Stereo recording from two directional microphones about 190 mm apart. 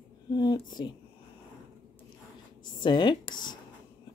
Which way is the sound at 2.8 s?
25° left (ahead or behind).